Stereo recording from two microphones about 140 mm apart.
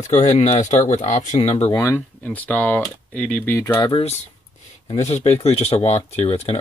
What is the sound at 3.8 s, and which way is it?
Speech, 40° left (ahead or behind).